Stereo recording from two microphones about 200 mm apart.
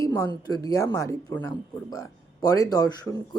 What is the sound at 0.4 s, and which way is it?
Speech, 20° left (ahead or behind).